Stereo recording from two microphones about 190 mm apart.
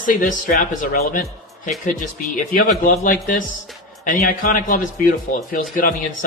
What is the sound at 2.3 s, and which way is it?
Speech, 45° left (ahead or behind).